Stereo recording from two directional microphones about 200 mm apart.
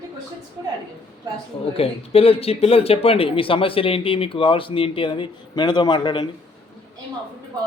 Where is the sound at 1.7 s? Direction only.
30° left (ahead or behind).